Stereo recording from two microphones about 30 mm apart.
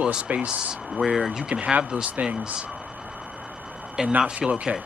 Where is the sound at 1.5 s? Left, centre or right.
Right.